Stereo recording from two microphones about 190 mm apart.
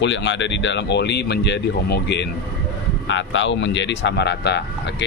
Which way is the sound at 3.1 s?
75° left (ahead or behind).